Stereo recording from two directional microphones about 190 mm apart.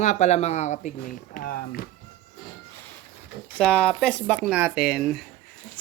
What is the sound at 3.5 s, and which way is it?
Speech, 5° left (ahead or behind).